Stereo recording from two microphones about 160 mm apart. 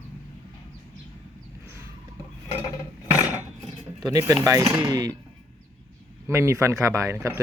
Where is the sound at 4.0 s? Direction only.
20° right (ahead or behind).